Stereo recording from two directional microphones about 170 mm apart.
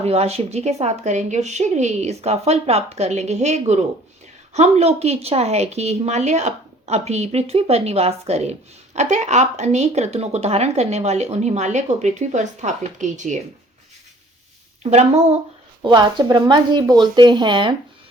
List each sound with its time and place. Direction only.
0.0 s a woman's voice: 40° right (ahead or behind)
14.8 s a woman's voice: 40° right (ahead or behind)
15.8 s speech: 25° right (ahead or behind)